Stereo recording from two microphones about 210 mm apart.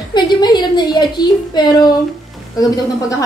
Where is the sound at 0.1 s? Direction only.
20° left (ahead or behind).